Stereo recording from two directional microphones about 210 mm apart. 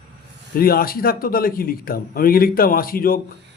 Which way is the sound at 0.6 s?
45° left (ahead or behind).